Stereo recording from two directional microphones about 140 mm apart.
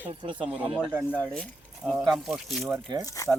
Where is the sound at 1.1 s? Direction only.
10° left (ahead or behind).